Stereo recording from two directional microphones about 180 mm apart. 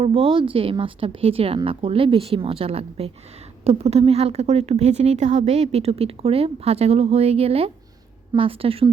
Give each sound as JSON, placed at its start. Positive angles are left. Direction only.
{"t": 0.0, "sound": "speech", "side_deg": -30}